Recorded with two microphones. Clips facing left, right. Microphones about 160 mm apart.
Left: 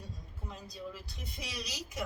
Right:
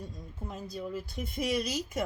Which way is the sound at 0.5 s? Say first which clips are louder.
Right 8 dB; 50° right (ahead or behind).